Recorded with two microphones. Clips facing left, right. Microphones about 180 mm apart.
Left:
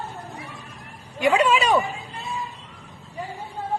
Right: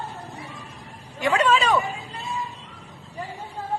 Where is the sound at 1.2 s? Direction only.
15° left (ahead or behind).